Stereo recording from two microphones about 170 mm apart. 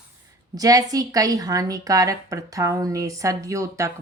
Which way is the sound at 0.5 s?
20° right (ahead or behind).